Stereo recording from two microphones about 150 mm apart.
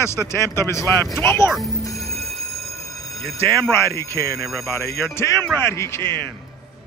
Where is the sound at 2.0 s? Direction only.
Centre (ahead or behind).